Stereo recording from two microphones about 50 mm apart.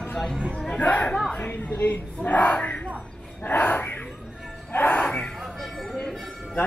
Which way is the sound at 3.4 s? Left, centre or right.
Left.